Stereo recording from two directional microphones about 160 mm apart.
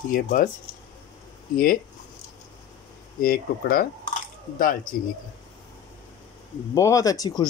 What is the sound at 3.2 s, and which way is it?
Speech, 65° left (ahead or behind).